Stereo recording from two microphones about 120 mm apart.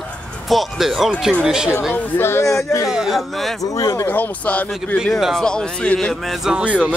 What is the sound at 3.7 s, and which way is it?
Speech, 25° left (ahead or behind).